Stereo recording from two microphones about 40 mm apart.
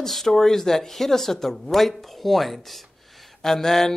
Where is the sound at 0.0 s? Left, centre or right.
Centre.